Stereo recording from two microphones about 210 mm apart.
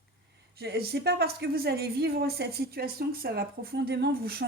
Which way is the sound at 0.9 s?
50° right (ahead or behind).